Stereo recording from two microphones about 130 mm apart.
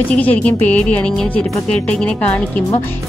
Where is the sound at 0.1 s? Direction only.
10° left (ahead or behind).